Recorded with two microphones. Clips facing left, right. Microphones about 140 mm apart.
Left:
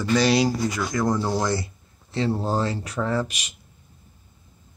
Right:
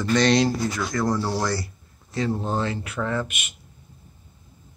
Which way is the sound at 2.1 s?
30° left (ahead or behind).